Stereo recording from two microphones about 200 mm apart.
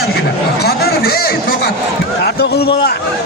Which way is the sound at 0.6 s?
50° left (ahead or behind).